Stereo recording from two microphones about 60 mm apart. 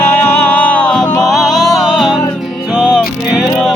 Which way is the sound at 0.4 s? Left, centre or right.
Left.